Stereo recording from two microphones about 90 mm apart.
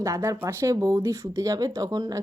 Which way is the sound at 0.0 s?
35° right (ahead or behind).